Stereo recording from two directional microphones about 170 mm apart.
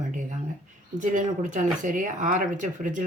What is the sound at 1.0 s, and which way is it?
Speech, 45° right (ahead or behind).